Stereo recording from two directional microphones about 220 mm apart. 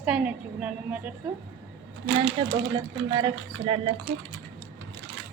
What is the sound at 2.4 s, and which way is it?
Speech, 20° right (ahead or behind).